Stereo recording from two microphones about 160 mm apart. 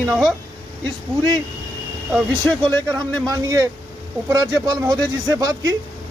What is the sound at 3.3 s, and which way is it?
Speech, 20° right (ahead or behind).